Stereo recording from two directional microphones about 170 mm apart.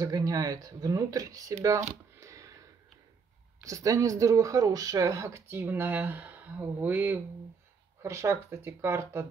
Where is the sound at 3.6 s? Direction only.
20° right (ahead or behind).